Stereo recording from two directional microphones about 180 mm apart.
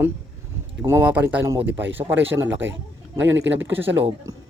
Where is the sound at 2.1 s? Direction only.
90° right.